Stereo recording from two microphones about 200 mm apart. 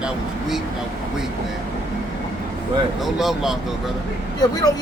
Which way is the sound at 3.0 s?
Centre (ahead or behind).